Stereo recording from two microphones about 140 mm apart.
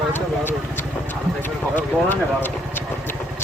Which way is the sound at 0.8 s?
15° left (ahead or behind).